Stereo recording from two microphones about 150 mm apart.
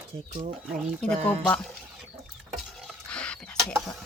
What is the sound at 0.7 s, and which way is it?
Speech, 5° right (ahead or behind).